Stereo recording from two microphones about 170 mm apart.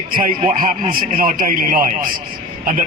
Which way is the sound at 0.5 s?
55° right (ahead or behind).